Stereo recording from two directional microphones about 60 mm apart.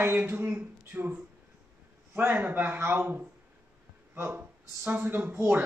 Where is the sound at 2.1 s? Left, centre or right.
Right.